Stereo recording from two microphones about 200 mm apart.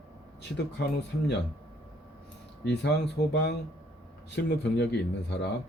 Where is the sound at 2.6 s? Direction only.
60° left (ahead or behind).